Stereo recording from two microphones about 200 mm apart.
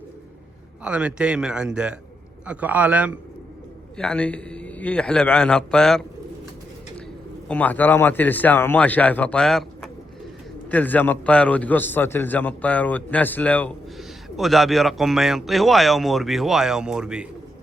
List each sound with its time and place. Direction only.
0.9 s a man's voice: 5° right (ahead or behind)
3.9 s speech: 5° left (ahead or behind)
7.4 s a man's voice: 5° left (ahead or behind)